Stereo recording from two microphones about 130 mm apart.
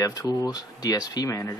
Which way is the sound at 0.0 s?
25° left (ahead or behind).